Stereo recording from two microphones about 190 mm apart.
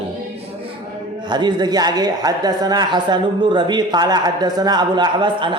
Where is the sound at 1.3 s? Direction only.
20° right (ahead or behind).